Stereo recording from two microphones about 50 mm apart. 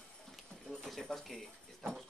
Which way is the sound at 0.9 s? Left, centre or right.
Centre.